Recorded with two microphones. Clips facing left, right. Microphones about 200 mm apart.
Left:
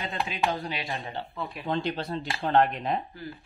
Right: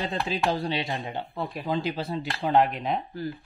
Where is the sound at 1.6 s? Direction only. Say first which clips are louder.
Even; 5° right (ahead or behind).